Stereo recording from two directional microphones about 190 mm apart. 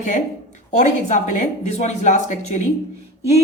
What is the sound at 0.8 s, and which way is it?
A woman's voice, 40° left (ahead or behind).